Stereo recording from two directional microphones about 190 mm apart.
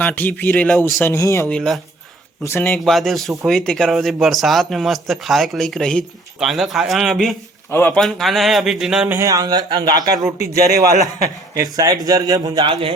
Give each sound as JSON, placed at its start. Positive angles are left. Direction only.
{"t": 0.0, "sound": "speech", "side_deg": 10}
{"t": 7.7, "sound": "speech", "side_deg": 10}
{"t": 10.3, "sound": "a man's voice", "side_deg": -55}
{"t": 11.5, "sound": "a man's voice", "side_deg": -20}